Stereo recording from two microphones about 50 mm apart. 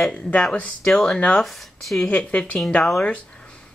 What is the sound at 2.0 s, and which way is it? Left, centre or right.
Speech, left.